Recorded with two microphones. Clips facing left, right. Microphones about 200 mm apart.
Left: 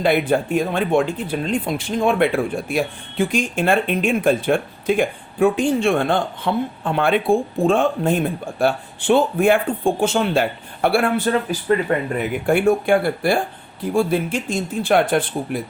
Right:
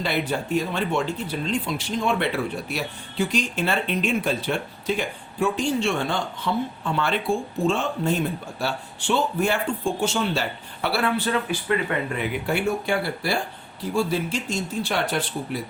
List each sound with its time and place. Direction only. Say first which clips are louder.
0.0 s speech: left 8 dB; 55° left (ahead or behind)